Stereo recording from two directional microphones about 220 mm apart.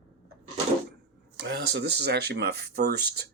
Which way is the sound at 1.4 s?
50° right (ahead or behind).